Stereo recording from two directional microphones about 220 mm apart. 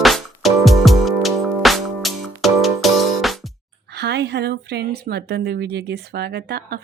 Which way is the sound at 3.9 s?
50° right (ahead or behind).